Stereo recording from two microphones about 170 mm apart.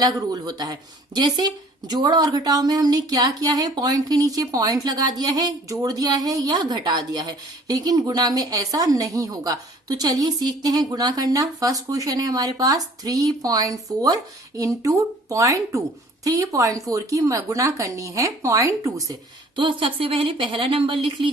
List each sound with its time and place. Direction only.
0.0 s speech: 20° right (ahead or behind)
19.5 s speech: 30° right (ahead or behind)